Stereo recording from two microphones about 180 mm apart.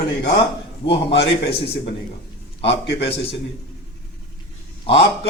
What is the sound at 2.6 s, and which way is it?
Speech, 70° left (ahead or behind).